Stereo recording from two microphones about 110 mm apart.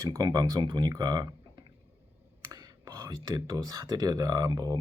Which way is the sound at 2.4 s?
40° right (ahead or behind).